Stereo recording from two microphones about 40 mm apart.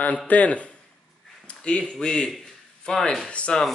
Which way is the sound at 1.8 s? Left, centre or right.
Centre.